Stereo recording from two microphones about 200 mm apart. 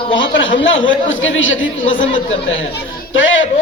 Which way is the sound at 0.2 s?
65° left (ahead or behind).